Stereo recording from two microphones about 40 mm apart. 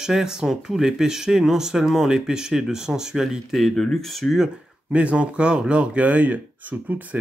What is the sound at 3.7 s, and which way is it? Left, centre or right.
Speech, centre.